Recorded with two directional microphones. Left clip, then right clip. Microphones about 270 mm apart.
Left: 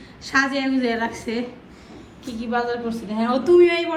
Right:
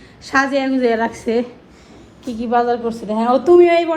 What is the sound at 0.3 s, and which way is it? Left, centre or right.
A woman's voice, centre.